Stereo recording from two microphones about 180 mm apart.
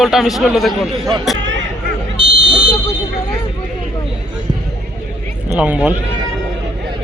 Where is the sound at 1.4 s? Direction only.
90° right.